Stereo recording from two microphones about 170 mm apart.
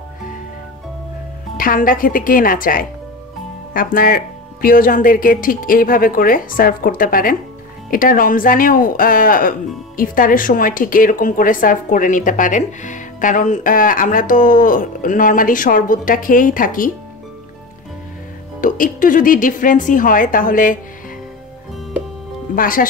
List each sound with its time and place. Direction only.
1.6 s speech: 55° left (ahead or behind)
18.6 s speech: 50° left (ahead or behind)
22.6 s speech: 55° left (ahead or behind)